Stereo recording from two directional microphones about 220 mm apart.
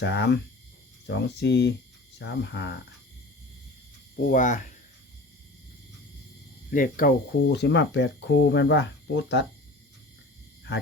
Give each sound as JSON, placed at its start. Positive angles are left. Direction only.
{"t": 0.0, "sound": "speech", "side_deg": 50}
{"t": 4.2, "sound": "speech", "side_deg": 35}
{"t": 6.7, "sound": "speech", "side_deg": 40}
{"t": 7.5, "sound": "speech", "side_deg": 50}